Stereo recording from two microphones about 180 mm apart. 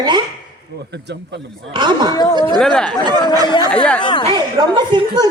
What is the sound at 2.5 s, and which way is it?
Speech, 5° left (ahead or behind).